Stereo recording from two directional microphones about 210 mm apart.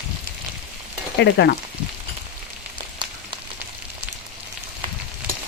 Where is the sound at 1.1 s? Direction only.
55° left (ahead or behind).